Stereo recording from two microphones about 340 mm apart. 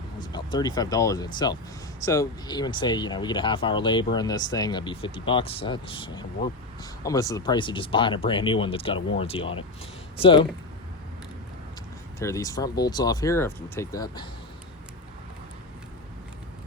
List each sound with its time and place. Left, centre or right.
0.2 s speech: centre
12.2 s speech: centre